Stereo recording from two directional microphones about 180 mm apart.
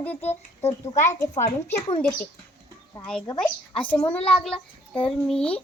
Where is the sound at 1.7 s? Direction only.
30° left (ahead or behind).